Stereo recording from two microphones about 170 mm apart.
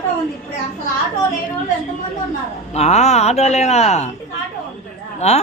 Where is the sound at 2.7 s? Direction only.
40° left (ahead or behind).